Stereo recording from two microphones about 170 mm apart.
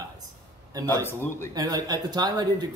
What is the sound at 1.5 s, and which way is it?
Speech, 25° right (ahead or behind).